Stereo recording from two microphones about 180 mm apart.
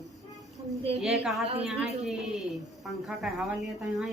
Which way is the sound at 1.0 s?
Centre (ahead or behind).